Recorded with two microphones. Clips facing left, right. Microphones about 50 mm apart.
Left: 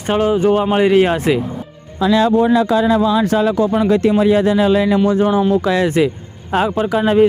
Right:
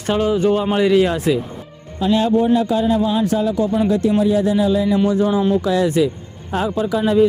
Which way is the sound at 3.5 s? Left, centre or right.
Left.